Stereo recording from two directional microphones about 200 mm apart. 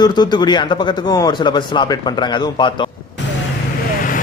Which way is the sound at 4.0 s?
45° left (ahead or behind).